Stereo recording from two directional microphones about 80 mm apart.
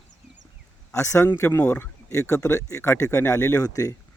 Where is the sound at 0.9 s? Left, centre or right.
Left.